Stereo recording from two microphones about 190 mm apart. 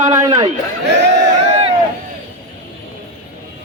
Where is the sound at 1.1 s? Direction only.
35° right (ahead or behind).